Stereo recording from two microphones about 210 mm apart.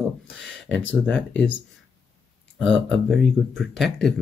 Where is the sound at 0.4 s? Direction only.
5° left (ahead or behind).